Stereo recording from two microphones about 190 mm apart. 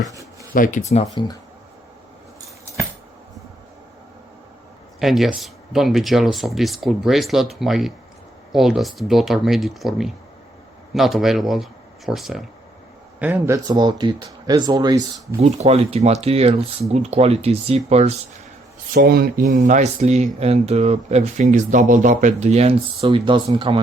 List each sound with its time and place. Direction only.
0.5 s speech: 45° left (ahead or behind)
4.9 s speech: centre (ahead or behind); by 15.4 s 20° right (ahead or behind)
15.4 s speech: 35° right (ahead or behind)
18.9 s speech: 50° right (ahead or behind); by 23.8 s 25° right (ahead or behind)